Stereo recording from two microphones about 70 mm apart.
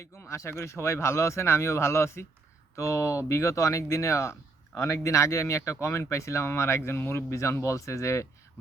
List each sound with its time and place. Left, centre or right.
0.0 s speech: left